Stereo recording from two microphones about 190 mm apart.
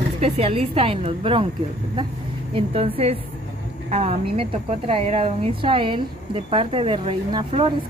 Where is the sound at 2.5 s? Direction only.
30° right (ahead or behind).